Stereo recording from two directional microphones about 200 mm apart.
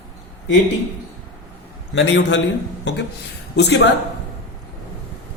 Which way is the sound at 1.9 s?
65° left (ahead or behind).